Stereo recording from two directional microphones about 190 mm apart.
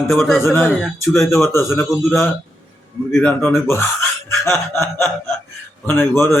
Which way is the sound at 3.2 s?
15° left (ahead or behind).